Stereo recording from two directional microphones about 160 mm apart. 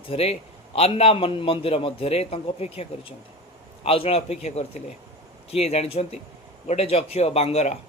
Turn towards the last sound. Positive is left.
turn(degrees=40)  # may be behind; listen again after turning